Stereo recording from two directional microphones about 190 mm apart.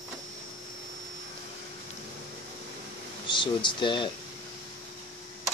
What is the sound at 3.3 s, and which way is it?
Speech, 25° left (ahead or behind).